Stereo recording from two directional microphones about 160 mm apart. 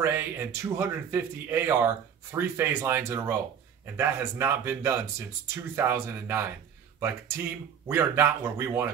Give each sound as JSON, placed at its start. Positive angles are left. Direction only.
{"t": 0.0, "sound": "speech", "side_deg": -15}